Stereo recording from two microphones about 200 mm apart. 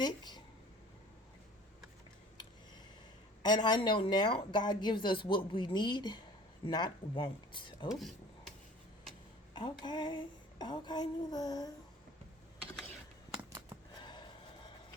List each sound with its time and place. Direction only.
0.0 s speech: 20° left (ahead or behind)
3.4 s a woman's voice: 20° left (ahead or behind)
7.9 s cutlery: centre (ahead or behind)
9.6 s a woman's voice: 25° left (ahead or behind)
14.0 s gasp: 25° left (ahead or behind)